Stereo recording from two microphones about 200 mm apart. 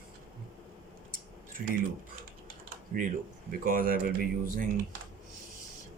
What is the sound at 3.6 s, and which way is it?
Speech, 45° right (ahead or behind).